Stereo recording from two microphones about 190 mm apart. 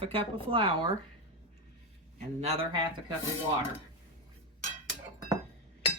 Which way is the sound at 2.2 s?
35° right (ahead or behind).